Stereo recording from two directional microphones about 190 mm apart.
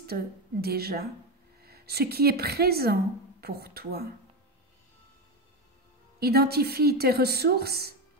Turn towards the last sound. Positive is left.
turn(degrees=-55)  # may be behind; listen again after turning